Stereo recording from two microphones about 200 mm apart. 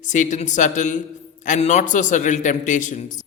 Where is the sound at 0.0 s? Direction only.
40° left (ahead or behind).